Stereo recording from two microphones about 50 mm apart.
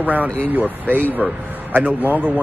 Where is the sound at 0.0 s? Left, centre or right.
Right.